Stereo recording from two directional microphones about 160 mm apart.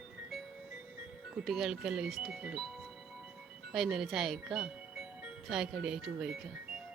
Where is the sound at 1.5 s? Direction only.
Centre (ahead or behind).